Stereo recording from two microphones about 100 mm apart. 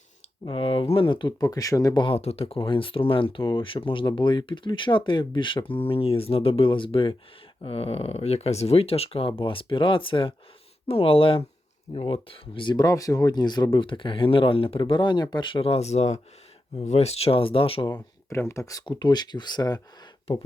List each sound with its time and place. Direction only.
0.4 s speech: 65° left (ahead or behind)
1.5 s speech: 35° left (ahead or behind)
2.0 s speech: 70° left (ahead or behind)
7.6 s speech: 75° left (ahead or behind)
9.4 s speech: 60° left (ahead or behind)
12.7 s speech: 35° left (ahead or behind)
13.7 s speech: 55° left (ahead or behind)
15.6 s speech: 85° left; by 17.8 s 65° left (ahead or behind)
18.3 s speech: 25° left (ahead or behind)
18.9 s speech: 50° left (ahead or behind)